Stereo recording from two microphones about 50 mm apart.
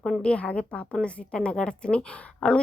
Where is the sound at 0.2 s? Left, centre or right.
Left.